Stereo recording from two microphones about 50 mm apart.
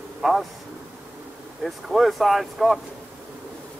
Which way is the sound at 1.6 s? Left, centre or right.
Centre.